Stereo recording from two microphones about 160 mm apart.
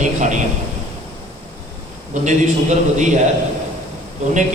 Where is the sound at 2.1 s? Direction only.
50° right (ahead or behind).